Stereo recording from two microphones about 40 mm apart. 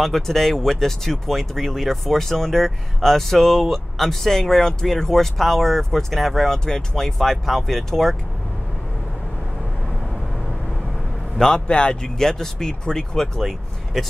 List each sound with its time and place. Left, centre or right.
0.0 s speech: centre
11.3 s a man's voice: centre
11.6 s speech: left
12.2 s speech: centre